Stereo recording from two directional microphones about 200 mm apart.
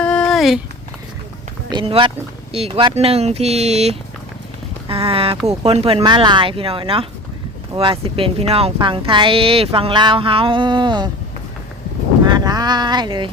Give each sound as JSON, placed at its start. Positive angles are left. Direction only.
{"t": 0.0, "sound": "a sound", "side_deg": 5}
{"t": 1.7, "sound": "speech", "side_deg": -25}
{"t": 12.2, "sound": "speech", "side_deg": -20}